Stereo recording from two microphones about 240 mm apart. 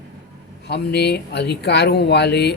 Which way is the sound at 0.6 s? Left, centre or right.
Left.